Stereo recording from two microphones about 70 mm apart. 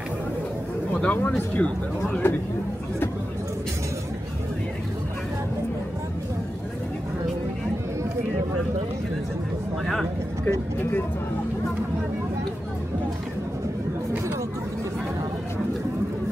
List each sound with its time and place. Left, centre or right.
1.0 s speech: left
2.2 s speech: left